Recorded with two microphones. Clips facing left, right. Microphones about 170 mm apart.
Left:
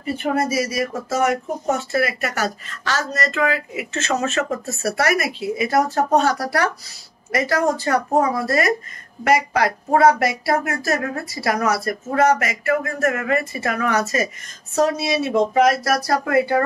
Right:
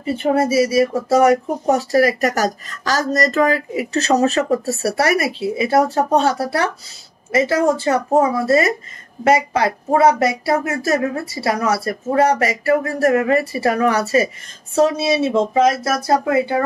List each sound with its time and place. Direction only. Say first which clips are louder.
0.0 s speech: right 4 dB; 30° right (ahead or behind)